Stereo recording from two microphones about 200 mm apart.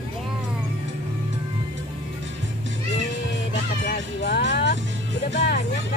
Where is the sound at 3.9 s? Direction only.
55° left (ahead or behind).